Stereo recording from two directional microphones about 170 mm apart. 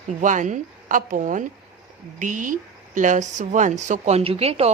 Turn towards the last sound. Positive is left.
turn(degrees=-35)  # may be behind; listen again after turning